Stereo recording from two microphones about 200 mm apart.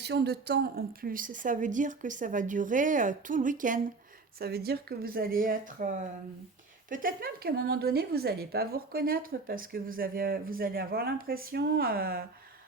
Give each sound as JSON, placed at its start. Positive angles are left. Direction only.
{"t": 0.0, "sound": "a woman's voice", "side_deg": -55}
{"t": 4.4, "sound": "a woman's voice", "side_deg": -50}
{"t": 6.9, "sound": "a woman's voice", "side_deg": -45}